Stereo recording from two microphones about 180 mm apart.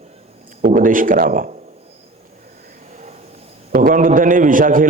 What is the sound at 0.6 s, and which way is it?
Speech, 50° right (ahead or behind).